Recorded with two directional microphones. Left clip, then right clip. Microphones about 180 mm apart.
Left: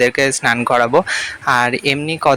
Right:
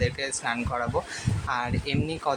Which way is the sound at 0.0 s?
45° left (ahead or behind).